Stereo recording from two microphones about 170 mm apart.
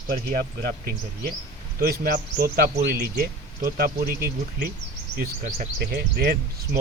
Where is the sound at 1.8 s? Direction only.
65° right (ahead or behind).